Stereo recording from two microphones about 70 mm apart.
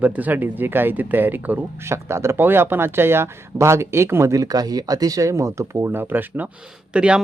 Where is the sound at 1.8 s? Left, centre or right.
Right.